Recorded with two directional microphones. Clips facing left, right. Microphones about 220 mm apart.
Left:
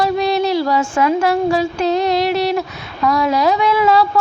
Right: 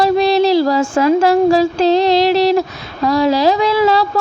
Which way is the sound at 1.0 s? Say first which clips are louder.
Right 5 dB; 35° right (ahead or behind).